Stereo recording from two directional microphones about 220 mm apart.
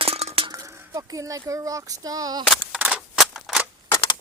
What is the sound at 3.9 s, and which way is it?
Crushing, 20° left (ahead or behind).